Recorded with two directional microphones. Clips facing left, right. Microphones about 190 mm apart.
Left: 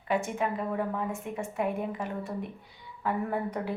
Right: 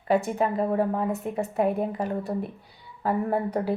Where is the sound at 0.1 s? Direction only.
35° right (ahead or behind).